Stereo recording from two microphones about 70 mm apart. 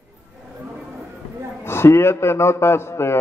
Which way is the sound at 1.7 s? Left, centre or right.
Left.